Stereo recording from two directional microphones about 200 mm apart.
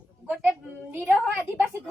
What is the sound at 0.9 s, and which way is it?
Speech, 10° right (ahead or behind).